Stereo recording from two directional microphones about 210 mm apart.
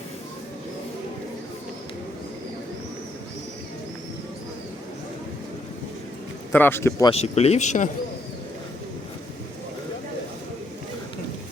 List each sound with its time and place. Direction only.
6.5 s speech: 10° left (ahead or behind)
7.1 s speech: 30° left (ahead or behind)